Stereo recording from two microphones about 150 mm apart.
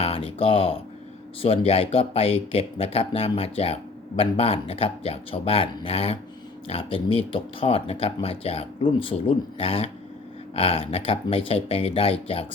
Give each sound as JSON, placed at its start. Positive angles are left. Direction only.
{"t": 0.0, "sound": "speech", "side_deg": 40}